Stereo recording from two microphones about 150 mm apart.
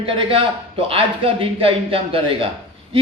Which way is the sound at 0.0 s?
35° right (ahead or behind).